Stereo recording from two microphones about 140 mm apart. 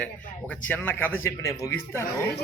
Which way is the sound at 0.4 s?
10° left (ahead or behind).